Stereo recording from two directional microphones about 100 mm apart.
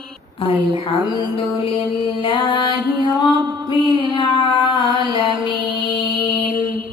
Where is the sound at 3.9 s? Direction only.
55° left (ahead or behind).